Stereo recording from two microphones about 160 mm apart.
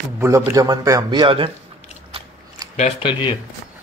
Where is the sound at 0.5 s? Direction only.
20° right (ahead or behind).